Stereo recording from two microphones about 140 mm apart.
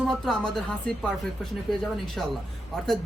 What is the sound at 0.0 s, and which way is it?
Speech, 5° left (ahead or behind).